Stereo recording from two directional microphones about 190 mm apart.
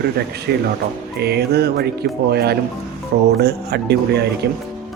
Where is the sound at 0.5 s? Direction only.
60° right (ahead or behind).